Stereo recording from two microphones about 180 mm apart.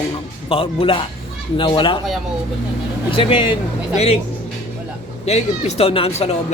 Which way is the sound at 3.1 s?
30° left (ahead or behind).